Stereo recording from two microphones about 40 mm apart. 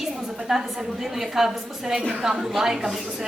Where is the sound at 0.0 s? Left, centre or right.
Centre.